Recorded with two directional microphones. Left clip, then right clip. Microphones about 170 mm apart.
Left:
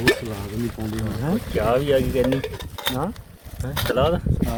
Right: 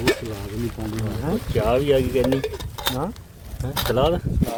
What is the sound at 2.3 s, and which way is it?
Speech, 30° right (ahead or behind).